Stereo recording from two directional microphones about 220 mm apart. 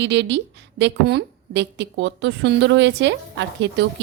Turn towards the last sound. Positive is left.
turn(degrees=-55)  # may be behind; listen again after turning